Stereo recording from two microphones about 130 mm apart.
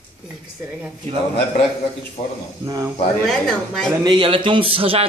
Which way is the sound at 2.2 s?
45° left (ahead or behind).